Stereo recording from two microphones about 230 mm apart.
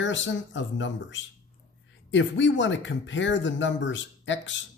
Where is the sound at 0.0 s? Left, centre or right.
Left.